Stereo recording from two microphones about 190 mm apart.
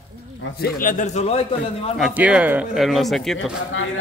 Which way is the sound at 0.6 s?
45° left (ahead or behind).